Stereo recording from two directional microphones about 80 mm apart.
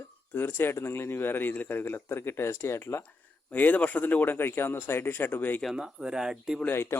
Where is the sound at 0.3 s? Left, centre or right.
Left.